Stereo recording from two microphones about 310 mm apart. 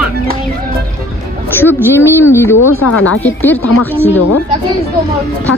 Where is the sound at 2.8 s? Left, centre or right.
Left.